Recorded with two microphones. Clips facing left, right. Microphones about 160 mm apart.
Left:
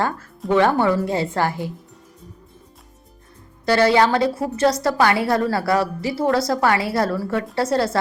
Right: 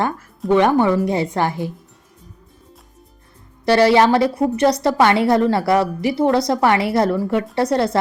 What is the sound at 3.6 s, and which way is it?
A woman's voice, 20° right (ahead or behind).